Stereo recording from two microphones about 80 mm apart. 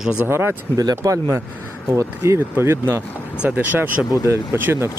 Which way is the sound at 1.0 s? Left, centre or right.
Right.